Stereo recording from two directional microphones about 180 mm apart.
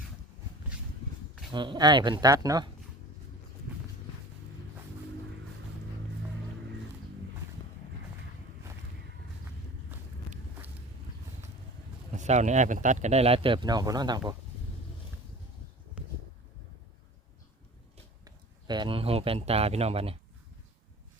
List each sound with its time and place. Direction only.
1.5 s speech: 25° right (ahead or behind)
12.1 s speech: 40° right (ahead or behind); by 14.3 s 20° right (ahead or behind)
18.3 s a man's voice: 25° right (ahead or behind)